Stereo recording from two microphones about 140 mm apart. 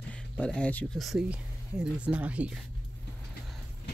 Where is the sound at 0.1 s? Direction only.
10° left (ahead or behind); by 2.6 s 10° right (ahead or behind).